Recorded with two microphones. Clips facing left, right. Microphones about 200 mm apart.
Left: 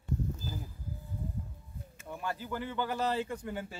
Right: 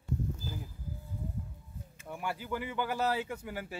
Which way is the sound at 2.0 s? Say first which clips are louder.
Even; 10° right (ahead or behind).